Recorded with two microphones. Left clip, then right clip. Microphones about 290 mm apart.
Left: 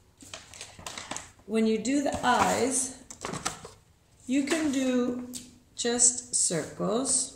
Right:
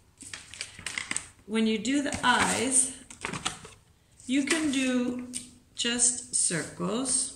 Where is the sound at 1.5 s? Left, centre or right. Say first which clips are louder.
Left 1 dB; centre.